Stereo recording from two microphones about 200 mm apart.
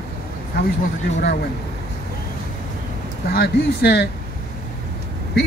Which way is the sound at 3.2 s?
50° left (ahead or behind).